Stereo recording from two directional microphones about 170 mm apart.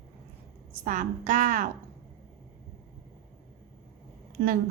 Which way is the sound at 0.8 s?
45° right (ahead or behind).